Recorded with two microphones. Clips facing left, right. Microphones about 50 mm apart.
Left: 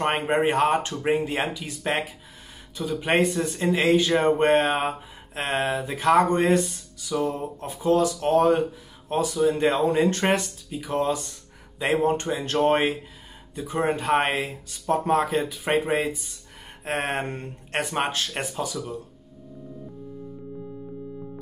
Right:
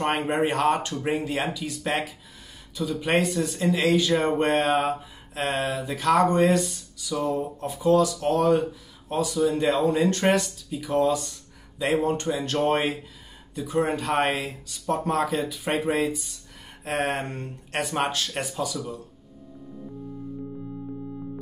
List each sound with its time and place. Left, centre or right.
0.0 s a man's voice: left
13.9 s speech: left